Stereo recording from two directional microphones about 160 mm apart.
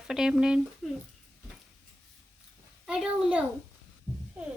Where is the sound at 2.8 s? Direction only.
5° right (ahead or behind).